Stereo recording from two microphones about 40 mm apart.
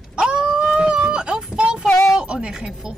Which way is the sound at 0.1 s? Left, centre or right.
Right.